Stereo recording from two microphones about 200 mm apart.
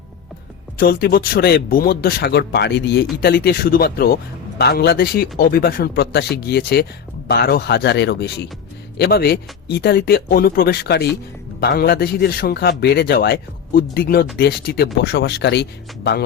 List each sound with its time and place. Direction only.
0.8 s a man's voice: 50° left (ahead or behind)